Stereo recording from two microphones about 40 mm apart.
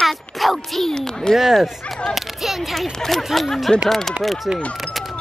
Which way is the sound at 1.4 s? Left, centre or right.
Centre.